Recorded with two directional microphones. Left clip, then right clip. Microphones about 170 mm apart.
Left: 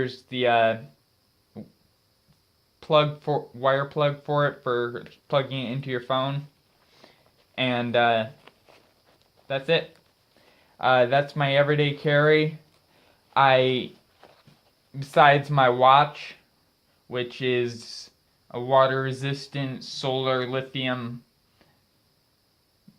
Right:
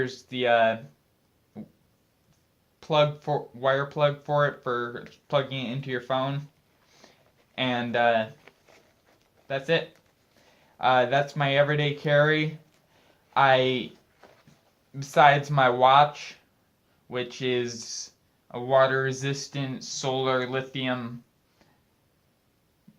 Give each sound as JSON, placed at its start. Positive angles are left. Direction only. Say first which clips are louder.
{"t": 0.0, "sound": "speech", "louder": "left 2 dB", "side_deg": 35}
{"t": 2.8, "sound": "speech", "louder": "left 2 dB", "side_deg": 35}
{"t": 7.0, "sound": "a sound", "louder": "left 2 dB", "side_deg": 30}
{"t": 7.5, "sound": "speech", "louder": "left 3 dB", "side_deg": 35}
{"t": 14.9, "sound": "speech", "louder": "left 1 dB", "side_deg": 35}